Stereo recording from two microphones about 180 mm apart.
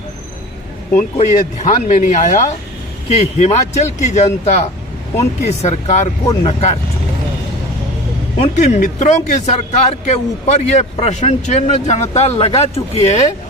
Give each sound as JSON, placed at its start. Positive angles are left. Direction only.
{"t": 1.1, "sound": "a man's voice", "side_deg": 35}
{"t": 8.4, "sound": "a man's voice", "side_deg": 40}